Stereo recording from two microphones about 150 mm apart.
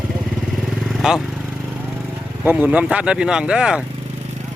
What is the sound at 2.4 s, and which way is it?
Speech, 10° right (ahead or behind).